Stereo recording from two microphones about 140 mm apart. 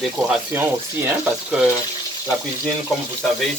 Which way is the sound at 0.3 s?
15° right (ahead or behind).